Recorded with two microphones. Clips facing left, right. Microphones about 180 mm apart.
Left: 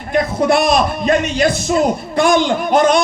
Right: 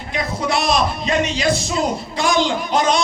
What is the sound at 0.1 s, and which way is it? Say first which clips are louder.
A man's voice: left 8 dB; 55° left (ahead or behind).